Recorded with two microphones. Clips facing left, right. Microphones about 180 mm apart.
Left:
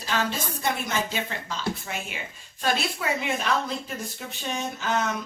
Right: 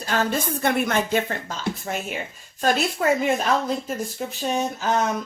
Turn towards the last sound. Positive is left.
turn(degrees=-40)  # may be behind; listen again after turning